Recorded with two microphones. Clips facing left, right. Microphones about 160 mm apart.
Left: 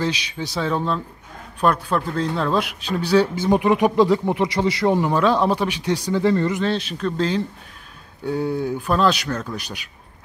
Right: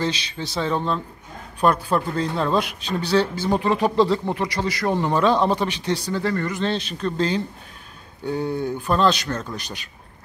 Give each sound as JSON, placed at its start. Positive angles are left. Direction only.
{"t": 0.0, "sound": "a man's voice", "side_deg": 10}
{"t": 4.9, "sound": "a man's voice", "side_deg": 5}
{"t": 6.0, "sound": "speech", "side_deg": 20}
{"t": 6.6, "sound": "a man's voice", "side_deg": 5}